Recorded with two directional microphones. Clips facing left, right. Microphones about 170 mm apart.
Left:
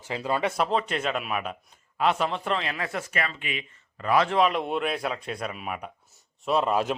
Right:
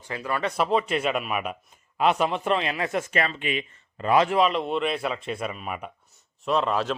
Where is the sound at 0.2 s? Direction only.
20° left (ahead or behind).